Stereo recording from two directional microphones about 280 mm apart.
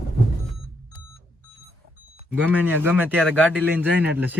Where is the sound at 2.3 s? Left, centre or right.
Centre.